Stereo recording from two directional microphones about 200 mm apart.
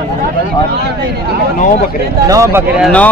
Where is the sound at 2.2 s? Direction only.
15° right (ahead or behind).